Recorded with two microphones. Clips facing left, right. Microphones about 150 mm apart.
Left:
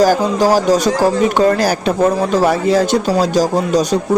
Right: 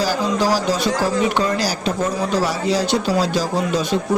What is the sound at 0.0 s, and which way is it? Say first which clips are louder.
Speech: left 7 dB; 45° left (ahead or behind).